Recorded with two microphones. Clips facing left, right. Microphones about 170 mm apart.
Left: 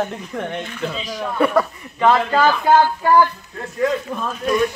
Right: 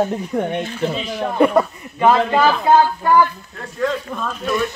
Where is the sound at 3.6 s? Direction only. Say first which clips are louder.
Left 2 dB; 15° left (ahead or behind).